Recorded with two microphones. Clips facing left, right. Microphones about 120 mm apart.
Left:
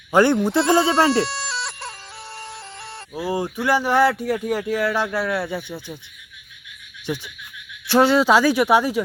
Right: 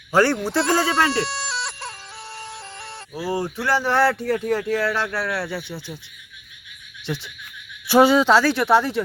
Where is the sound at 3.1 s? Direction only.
15° left (ahead or behind).